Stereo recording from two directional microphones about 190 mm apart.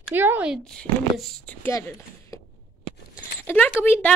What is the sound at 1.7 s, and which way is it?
Speech, 15° left (ahead or behind).